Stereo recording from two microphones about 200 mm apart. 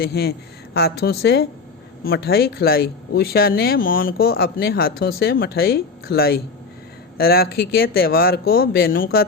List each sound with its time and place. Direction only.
0.0 s speech: 50° left (ahead or behind)